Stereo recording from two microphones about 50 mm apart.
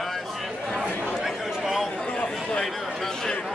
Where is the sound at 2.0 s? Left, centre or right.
Centre.